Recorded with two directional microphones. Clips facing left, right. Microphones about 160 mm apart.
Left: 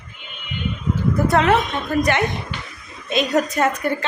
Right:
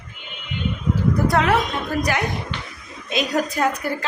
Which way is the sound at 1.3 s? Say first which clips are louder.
Left 4 dB; centre (ahead or behind).